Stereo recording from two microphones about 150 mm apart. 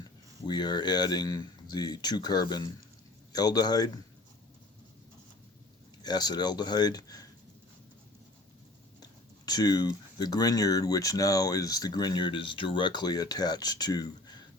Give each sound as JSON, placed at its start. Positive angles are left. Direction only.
{"t": 0.4, "sound": "speech", "side_deg": 30}
{"t": 6.0, "sound": "speech", "side_deg": 25}
{"t": 9.5, "sound": "speech", "side_deg": 25}